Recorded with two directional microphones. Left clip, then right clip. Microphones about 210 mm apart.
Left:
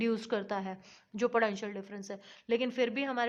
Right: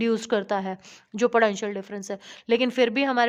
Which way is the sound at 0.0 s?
40° right (ahead or behind).